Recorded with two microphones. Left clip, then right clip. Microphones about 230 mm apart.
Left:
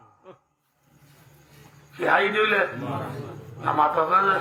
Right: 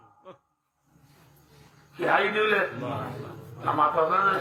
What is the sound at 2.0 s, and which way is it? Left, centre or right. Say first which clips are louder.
A man's voice: left 3 dB; left.